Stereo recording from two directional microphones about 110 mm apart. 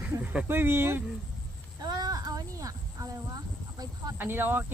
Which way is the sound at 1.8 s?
35° right (ahead or behind).